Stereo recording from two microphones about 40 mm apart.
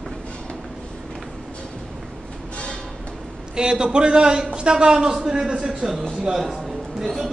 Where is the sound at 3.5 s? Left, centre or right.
Right.